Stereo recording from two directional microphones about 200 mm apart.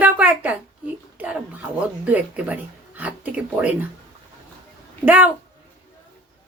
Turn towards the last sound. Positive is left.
turn(degrees=-10)  # may be behind; listen again after turning